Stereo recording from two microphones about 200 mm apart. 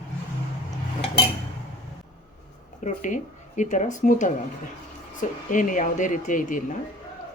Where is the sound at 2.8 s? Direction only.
35° left (ahead or behind).